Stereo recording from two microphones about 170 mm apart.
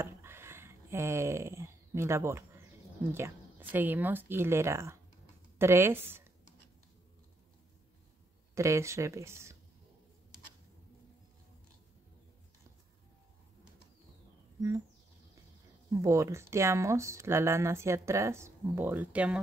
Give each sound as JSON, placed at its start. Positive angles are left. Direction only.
{"t": 0.0, "sound": "a sound", "side_deg": -15}
{"t": 5.6, "sound": "speech", "side_deg": -15}
{"t": 8.5, "sound": "speech", "side_deg": -15}
{"t": 15.9, "sound": "speech", "side_deg": -15}